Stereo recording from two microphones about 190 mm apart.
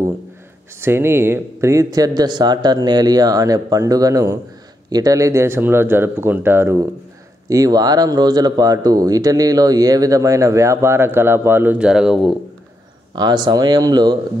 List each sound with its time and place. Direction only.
0.7 s speech: 15° right (ahead or behind)
13.1 s speech: 20° right (ahead or behind)